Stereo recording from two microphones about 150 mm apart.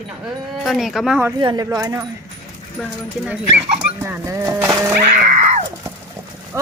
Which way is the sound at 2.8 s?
Centre (ahead or behind).